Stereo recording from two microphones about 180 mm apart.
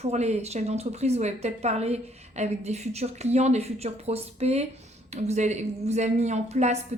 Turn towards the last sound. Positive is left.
turn(degrees=-40)  # may be behind; listen again after turning